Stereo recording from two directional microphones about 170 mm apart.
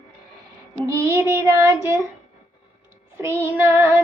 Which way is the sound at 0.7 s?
20° right (ahead or behind).